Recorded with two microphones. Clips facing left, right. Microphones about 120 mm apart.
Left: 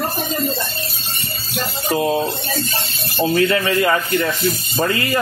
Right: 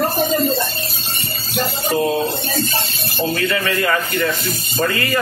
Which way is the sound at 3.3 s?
25° left (ahead or behind).